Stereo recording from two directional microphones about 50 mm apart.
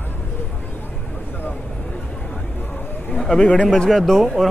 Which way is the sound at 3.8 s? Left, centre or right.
Centre.